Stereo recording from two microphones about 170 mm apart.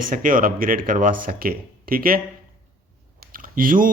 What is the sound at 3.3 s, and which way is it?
Typing, 55° right (ahead or behind).